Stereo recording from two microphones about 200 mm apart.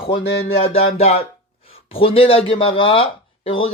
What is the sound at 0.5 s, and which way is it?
A man's voice, 30° left (ahead or behind).